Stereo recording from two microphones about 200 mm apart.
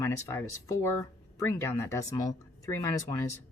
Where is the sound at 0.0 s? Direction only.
15° left (ahead or behind).